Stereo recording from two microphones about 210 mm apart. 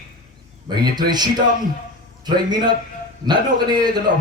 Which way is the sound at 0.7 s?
20° right (ahead or behind).